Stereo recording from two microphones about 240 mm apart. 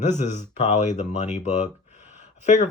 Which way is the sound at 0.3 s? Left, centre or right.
Left.